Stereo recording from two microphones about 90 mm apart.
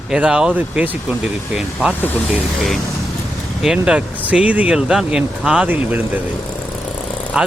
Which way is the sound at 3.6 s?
10° right (ahead or behind).